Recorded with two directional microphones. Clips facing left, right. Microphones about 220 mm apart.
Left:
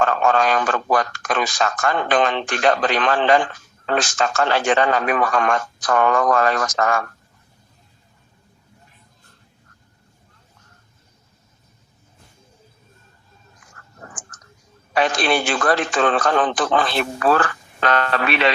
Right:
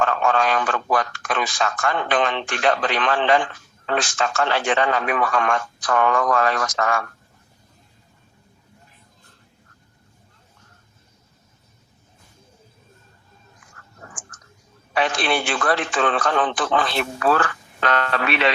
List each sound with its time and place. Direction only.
0.0 s speech: 40° left (ahead or behind)
14.0 s a sound: 45° left (ahead or behind)
14.9 s speech: 40° left (ahead or behind)